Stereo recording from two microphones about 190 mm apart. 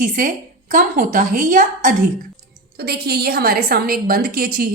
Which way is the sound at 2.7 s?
55° right (ahead or behind).